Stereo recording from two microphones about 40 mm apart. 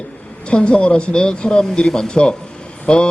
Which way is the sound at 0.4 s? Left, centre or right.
Left.